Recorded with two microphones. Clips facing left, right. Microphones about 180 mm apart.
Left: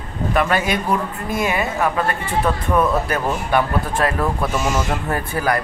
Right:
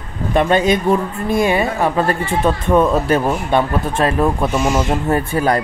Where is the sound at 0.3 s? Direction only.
25° right (ahead or behind).